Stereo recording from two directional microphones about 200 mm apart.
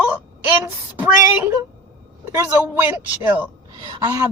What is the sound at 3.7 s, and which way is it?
Speech, 20° right (ahead or behind).